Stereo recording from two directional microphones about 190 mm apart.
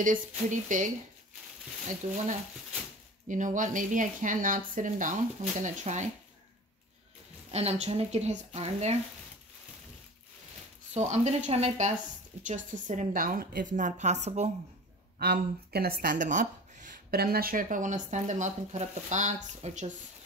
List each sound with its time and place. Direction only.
0.0 s speech: 45° right (ahead or behind)
3.3 s speech: 40° right (ahead or behind)
7.5 s a woman's voice: 35° right (ahead or behind)
10.9 s a woman's voice: 35° right (ahead or behind)
15.1 s speech: 55° right (ahead or behind); by 19.9 s 40° right (ahead or behind)